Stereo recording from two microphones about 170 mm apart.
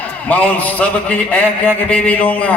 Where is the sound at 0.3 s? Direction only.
10° left (ahead or behind).